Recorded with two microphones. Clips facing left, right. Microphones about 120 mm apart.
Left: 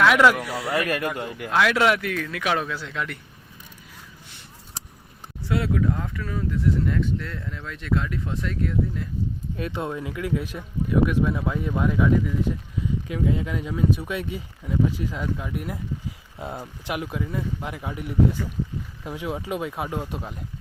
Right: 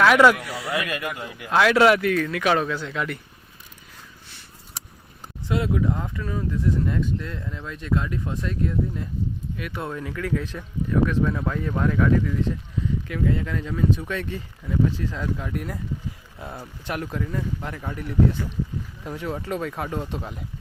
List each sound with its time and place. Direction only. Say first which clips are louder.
0.0 s speech: right 2 dB; centre (ahead or behind)
0.9 s speech: left 4 dB; 45° left (ahead or behind)
1.5 s speech: right 3 dB; centre (ahead or behind)
5.5 s speech: even; 20° right (ahead or behind)
9.6 s speech: left 6 dB; 30° left (ahead or behind)
9.8 s speech: left 1 dB; 20° left (ahead or behind)
16.4 s speech: left 3 dB; 20° left (ahead or behind); by 20.4 s 5° left (ahead or behind)